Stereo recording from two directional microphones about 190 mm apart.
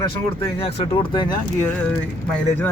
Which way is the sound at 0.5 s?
30° left (ahead or behind).